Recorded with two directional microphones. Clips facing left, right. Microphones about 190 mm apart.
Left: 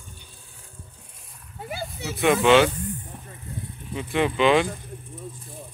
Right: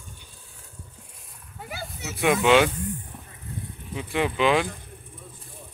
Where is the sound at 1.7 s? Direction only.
25° left (ahead or behind).